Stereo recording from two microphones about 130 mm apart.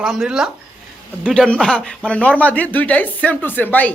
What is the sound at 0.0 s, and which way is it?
Speech, 5° right (ahead or behind).